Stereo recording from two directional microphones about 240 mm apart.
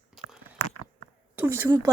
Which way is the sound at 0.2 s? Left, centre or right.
Centre.